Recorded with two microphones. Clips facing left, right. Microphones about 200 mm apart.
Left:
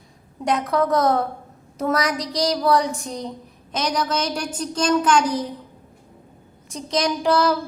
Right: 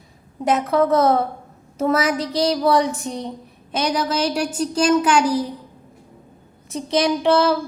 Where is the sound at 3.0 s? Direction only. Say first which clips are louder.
Right 3 dB; 30° right (ahead or behind).